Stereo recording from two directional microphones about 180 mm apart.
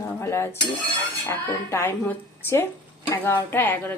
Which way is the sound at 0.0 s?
15° left (ahead or behind).